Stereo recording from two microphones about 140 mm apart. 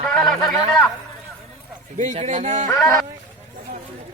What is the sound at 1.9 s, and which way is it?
Speech, 60° right (ahead or behind).